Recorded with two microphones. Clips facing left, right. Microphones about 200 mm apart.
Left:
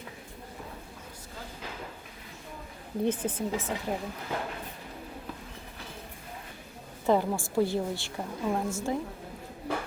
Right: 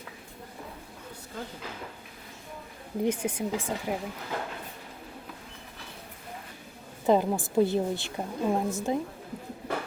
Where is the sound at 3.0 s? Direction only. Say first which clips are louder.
Right 1 dB; 10° right (ahead or behind).